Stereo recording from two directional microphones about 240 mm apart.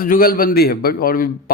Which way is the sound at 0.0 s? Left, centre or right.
Left.